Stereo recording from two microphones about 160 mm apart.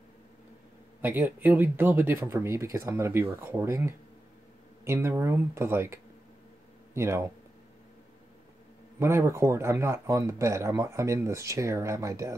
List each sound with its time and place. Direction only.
1.0 s speech: 10° right (ahead or behind)
9.0 s speech: 15° right (ahead or behind)